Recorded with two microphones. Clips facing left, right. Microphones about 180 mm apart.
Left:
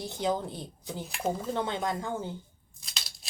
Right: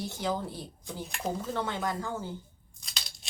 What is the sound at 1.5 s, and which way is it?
Speech, 20° left (ahead or behind).